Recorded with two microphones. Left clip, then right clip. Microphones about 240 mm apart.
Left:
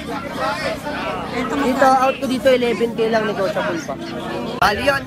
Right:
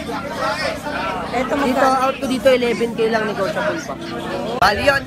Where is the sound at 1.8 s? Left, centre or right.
Left.